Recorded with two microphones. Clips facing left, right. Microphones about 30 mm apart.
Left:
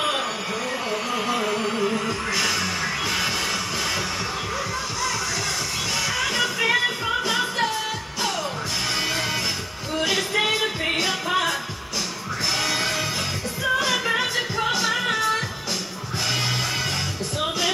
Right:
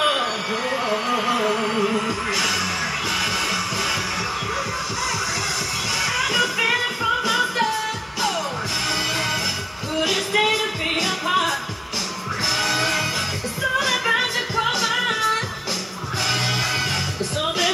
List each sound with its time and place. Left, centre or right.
0.0 s music: right; by 2.6 s centre
6.0 s music: centre
6.4 s music: centre
10.0 s music: centre
12.5 s music: centre
17.4 s music: centre